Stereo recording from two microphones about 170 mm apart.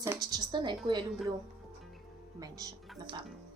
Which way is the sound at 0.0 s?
20° right (ahead or behind).